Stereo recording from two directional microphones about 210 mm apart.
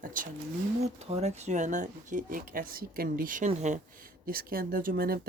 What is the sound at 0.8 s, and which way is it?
Speech, 30° right (ahead or behind).